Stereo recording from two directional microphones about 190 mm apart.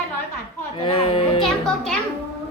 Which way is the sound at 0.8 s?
30° left (ahead or behind).